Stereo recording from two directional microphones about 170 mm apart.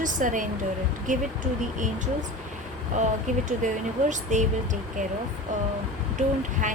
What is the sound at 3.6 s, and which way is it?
A woman's voice, 45° right (ahead or behind).